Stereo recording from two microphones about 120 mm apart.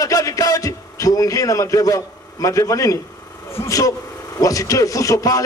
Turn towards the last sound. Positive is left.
turn(degrees=30)  # may be behind; listen again after turning